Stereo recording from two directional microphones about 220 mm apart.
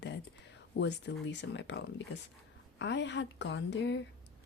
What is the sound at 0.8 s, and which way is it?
Speech, 50° left (ahead or behind).